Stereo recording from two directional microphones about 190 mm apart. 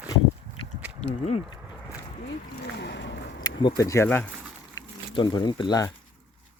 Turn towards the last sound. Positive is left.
turn(degrees=20)  # may be behind; listen again after turning